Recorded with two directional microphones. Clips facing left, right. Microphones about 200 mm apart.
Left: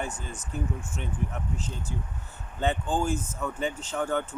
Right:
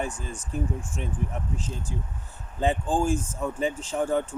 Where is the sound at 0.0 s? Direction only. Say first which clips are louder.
Right 3 dB; 30° right (ahead or behind).